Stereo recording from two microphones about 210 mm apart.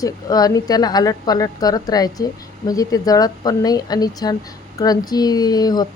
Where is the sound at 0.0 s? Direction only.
15° left (ahead or behind).